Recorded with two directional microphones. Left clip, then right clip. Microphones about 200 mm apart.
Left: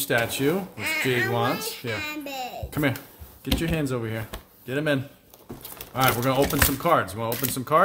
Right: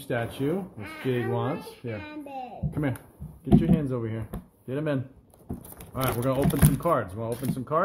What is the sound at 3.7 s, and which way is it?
Speech, 10° left (ahead or behind).